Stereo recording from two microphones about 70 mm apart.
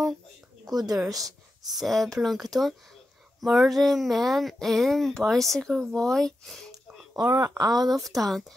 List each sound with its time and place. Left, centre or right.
0.7 s speech: right
1.7 s speech: centre
7.3 s speech: right
7.9 s speech: centre